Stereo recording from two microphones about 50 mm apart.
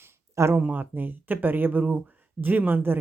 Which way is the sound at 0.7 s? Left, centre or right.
Right.